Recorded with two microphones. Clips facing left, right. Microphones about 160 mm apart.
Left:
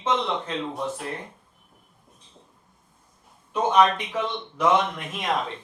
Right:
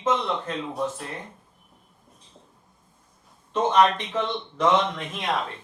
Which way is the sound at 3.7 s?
10° left (ahead or behind).